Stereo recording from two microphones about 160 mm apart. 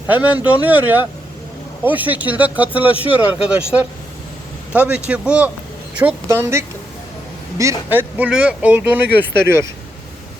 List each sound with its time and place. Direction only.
0.1 s speech: 10° right (ahead or behind)